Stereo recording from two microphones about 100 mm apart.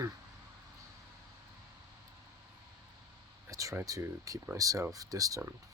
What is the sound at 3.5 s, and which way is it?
Speech, 35° right (ahead or behind).